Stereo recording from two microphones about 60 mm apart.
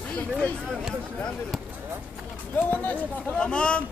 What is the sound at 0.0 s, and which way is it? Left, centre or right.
Speech, left.